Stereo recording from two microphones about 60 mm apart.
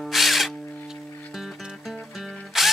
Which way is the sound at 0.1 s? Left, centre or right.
Centre.